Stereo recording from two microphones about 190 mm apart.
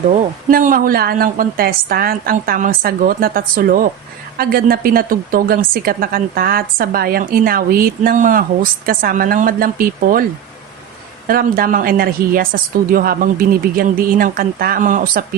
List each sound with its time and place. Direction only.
0.5 s a woman's voice: 45° right (ahead or behind)
11.3 s a woman's voice: 50° right (ahead or behind)